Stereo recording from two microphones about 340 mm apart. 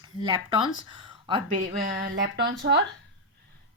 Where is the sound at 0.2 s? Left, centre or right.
Centre; by 2.8 s right.